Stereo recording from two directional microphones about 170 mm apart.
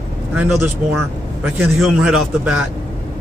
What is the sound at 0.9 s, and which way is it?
Speech, centre (ahead or behind).